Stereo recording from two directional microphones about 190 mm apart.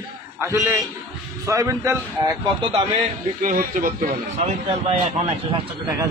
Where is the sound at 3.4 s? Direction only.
45° right (ahead or behind).